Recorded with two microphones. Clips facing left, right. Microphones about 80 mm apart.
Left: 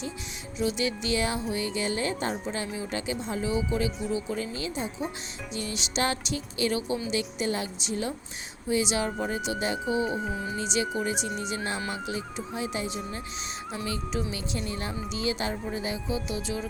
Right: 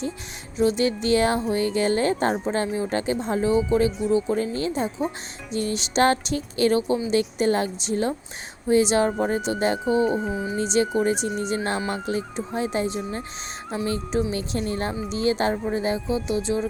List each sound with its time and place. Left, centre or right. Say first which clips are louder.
0.6 s speech: right 7 dB; right
10.2 s a sound: right 5 dB; centre
10.6 s speech: right 8 dB; right